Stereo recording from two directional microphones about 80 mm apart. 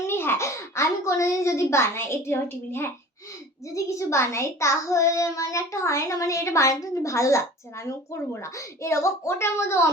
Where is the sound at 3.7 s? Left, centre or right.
Left.